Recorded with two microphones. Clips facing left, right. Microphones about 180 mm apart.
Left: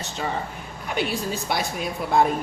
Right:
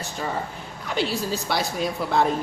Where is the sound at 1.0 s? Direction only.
55° left (ahead or behind).